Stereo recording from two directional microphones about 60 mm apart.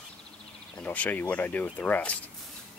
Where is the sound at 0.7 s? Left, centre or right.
Left.